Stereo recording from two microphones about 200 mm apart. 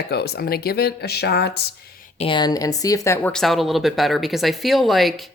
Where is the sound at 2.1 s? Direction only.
25° left (ahead or behind).